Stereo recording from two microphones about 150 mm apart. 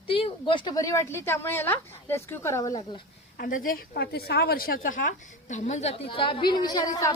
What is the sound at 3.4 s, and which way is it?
A woman's voice, 75° left (ahead or behind).